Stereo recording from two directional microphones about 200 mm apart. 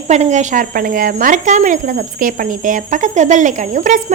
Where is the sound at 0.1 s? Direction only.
35° right (ahead or behind).